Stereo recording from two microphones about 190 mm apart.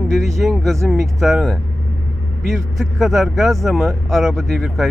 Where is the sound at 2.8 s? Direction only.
Centre (ahead or behind).